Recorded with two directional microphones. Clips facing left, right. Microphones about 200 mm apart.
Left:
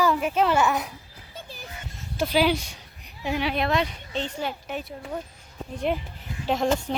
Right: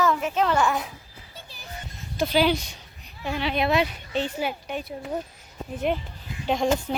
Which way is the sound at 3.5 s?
5° right (ahead or behind).